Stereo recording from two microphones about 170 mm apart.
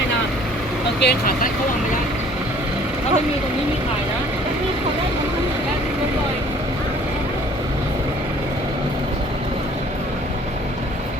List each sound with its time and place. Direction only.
1.0 s speech: 60° left (ahead or behind)